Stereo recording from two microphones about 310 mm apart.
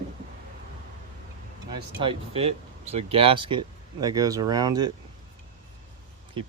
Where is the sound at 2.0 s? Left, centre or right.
Centre.